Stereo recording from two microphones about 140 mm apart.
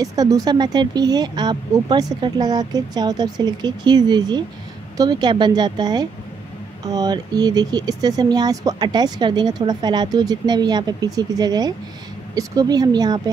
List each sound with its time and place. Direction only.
0.0 s a woman's voice: 25° right (ahead or behind)